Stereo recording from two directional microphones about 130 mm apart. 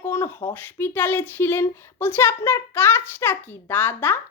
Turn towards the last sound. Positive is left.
turn(degrees=15)  # may be behind; listen again after turning